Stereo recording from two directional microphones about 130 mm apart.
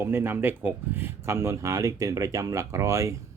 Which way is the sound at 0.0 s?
15° right (ahead or behind).